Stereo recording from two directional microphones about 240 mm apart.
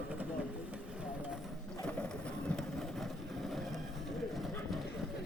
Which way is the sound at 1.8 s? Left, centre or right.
Centre.